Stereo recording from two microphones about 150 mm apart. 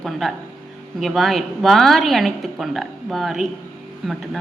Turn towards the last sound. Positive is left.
turn(degrees=0)  # may be behind; listen again after turning